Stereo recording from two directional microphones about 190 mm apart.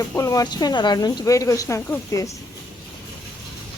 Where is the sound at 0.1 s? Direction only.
15° left (ahead or behind).